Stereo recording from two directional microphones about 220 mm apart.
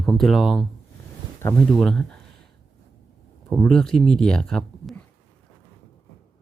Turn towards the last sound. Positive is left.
turn(degrees=5)  # may be behind; listen again after turning